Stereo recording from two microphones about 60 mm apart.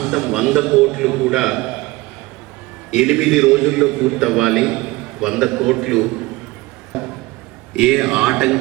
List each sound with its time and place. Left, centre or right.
0.0 s a man's voice: centre
3.0 s a man's voice: centre